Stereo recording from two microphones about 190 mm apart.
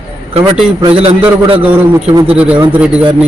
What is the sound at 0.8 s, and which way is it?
Speech, 30° right (ahead or behind).